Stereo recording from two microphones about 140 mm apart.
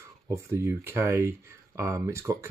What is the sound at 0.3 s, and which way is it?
Speech, 20° right (ahead or behind).